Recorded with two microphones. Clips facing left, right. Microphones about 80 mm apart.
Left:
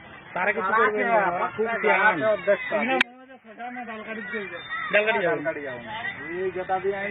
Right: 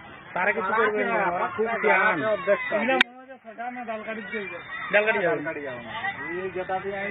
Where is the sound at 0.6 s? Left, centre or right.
Left.